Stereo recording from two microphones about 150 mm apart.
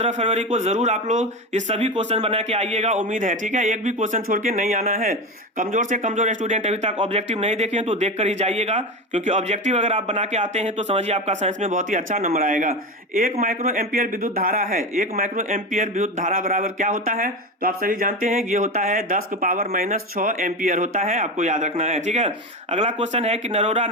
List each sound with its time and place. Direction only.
0.0 s a man's voice: 45° right (ahead or behind)